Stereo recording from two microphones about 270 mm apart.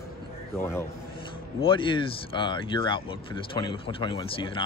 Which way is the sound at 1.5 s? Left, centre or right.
Centre.